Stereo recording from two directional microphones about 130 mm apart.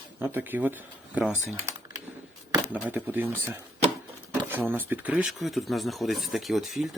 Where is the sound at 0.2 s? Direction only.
15° right (ahead or behind).